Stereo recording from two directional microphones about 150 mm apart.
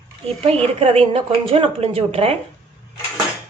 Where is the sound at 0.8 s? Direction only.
40° right (ahead or behind).